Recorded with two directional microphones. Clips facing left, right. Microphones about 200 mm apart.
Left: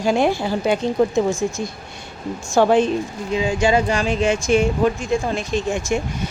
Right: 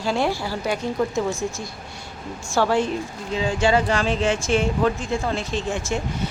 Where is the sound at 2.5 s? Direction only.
20° left (ahead or behind).